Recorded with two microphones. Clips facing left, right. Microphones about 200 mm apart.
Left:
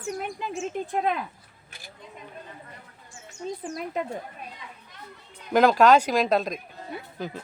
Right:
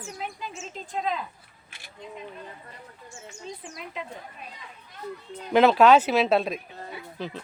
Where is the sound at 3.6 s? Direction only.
45° left (ahead or behind).